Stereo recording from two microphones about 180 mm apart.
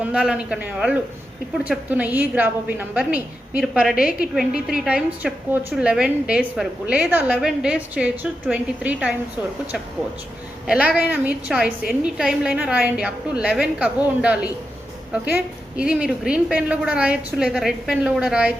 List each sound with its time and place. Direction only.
0.0 s a woman's voice: 5° right (ahead or behind)
3.9 s a woman's voice: 55° left (ahead or behind)
4.6 s a woman's voice: 5° right (ahead or behind)
10.7 s a woman's voice: 5° right (ahead or behind)
15.7 s a woman's voice: 5° right (ahead or behind)